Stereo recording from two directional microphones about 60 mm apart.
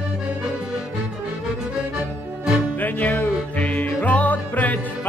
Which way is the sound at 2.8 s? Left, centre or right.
Left.